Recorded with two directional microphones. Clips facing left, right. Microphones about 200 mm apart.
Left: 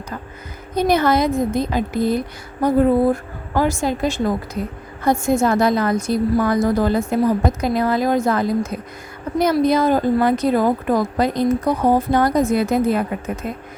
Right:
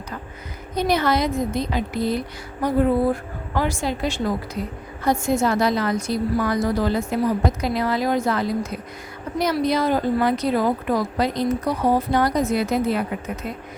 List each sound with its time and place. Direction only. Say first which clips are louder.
0.8 s a woman's voice: left 4 dB; 50° left (ahead or behind)
5.3 s a woman's voice: left 4 dB; 50° left (ahead or behind)